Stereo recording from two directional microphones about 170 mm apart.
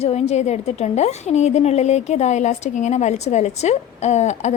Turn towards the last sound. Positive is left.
turn(degrees=40)  # may be behind; listen again after turning